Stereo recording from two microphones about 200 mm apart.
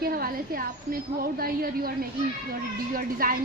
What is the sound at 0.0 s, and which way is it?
A woman's voice, 45° right (ahead or behind).